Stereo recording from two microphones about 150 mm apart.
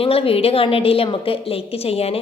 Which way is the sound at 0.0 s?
40° left (ahead or behind).